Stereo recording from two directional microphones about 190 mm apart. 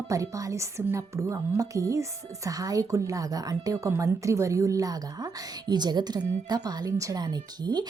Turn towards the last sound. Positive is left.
turn(degrees=-20)  # may be behind; listen again after turning